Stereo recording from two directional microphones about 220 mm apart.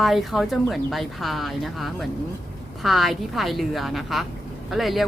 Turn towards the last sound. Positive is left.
turn(degrees=0)  # may be behind; listen again after turning